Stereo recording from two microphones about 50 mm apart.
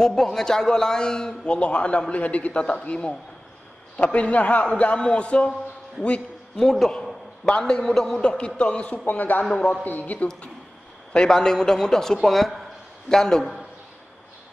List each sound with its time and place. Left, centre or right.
0.0 s a man's voice: centre
6.6 s a man's voice: centre
8.2 s a man's voice: left
9.0 s a man's voice: left
9.4 s a man's voice: centre
9.8 s a man's voice: left
11.1 s a man's voice: centre